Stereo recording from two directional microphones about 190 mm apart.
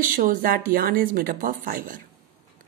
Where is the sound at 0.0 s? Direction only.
45° right (ahead or behind).